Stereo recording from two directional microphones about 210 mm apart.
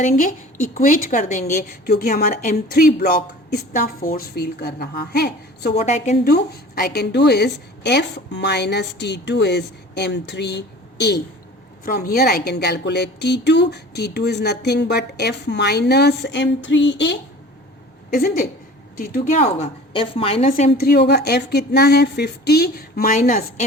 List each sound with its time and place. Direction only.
0.0 s a woman's voice: 35° left (ahead or behind)
5.7 s a woman's voice: 30° left (ahead or behind)
6.2 s a woman's voice: 50° left (ahead or behind)
18.1 s a woman's voice: 45° left (ahead or behind)
19.9 s a woman's voice: 25° left (ahead or behind)
20.7 s a woman's voice: 50° left (ahead or behind)